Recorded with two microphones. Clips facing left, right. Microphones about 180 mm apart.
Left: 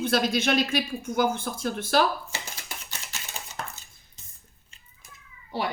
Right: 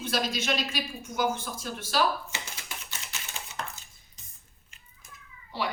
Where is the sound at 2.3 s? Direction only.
40° left (ahead or behind).